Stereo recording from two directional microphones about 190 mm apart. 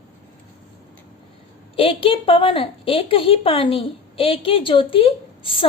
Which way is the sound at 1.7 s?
30° left (ahead or behind).